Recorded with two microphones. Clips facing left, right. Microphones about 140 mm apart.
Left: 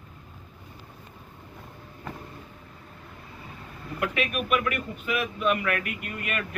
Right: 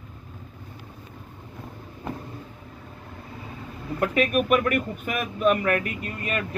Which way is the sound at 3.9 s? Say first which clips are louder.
Right 6 dB; 40° right (ahead or behind).